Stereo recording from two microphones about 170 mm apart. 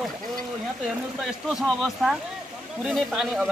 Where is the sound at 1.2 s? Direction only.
Centre (ahead or behind).